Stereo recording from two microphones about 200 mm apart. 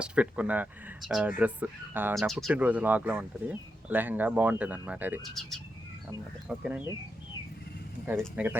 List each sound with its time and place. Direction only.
0.0 s speech: 5° right (ahead or behind)
2.1 s speech: centre (ahead or behind)
8.4 s speech: 10° right (ahead or behind)